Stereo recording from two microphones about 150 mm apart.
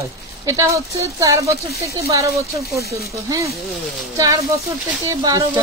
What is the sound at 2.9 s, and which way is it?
Stir, 20° right (ahead or behind).